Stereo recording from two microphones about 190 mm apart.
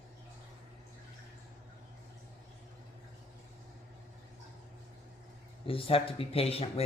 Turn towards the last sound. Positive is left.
turn(degrees=30)  # may be behind; listen again after turning